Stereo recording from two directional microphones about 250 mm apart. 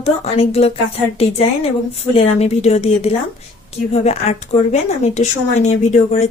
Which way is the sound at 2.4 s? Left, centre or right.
Left.